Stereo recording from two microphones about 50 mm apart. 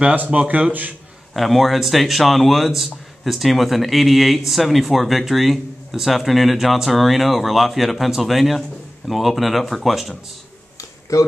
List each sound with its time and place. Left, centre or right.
0.1 s speech: right
1.3 s speech: centre
11.1 s speech: left